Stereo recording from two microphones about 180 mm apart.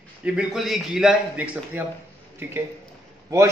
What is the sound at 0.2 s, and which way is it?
A man's voice, 5° right (ahead or behind).